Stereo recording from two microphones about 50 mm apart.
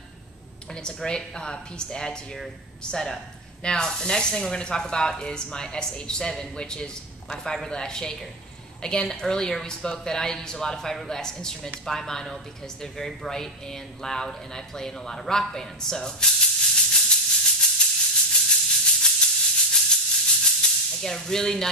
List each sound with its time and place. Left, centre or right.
0.8 s speech: centre
18.1 s maraca: centre